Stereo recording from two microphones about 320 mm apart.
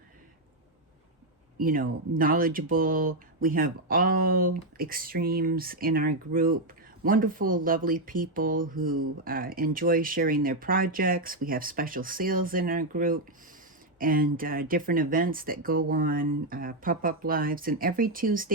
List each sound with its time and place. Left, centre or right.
1.5 s speech: right